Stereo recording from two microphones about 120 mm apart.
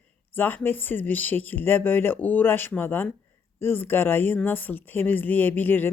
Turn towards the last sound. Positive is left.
turn(degrees=15)  # may be behind; listen again after turning